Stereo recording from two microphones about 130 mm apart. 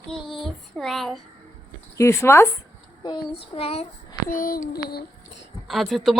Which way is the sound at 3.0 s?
35° left (ahead or behind).